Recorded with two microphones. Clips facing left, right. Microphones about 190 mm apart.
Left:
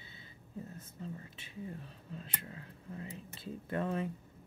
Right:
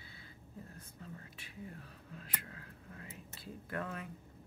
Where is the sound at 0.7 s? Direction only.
25° left (ahead or behind).